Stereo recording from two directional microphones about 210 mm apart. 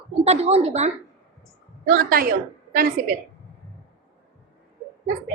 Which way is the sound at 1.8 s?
45° right (ahead or behind).